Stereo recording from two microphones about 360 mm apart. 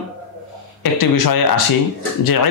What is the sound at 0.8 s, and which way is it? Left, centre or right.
Speech, left.